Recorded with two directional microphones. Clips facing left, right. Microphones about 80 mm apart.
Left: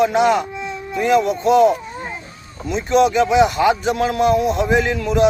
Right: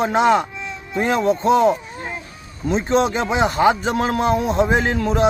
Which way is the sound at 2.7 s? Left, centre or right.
Right.